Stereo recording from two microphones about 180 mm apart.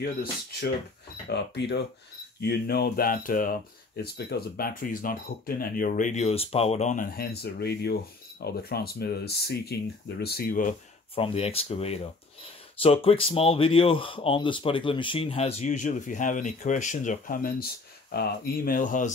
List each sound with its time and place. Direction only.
0.0 s speech: 60° left (ahead or behind)
11.1 s speech: 30° left (ahead or behind)